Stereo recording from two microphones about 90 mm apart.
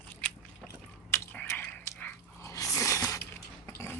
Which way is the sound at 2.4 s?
35° left (ahead or behind).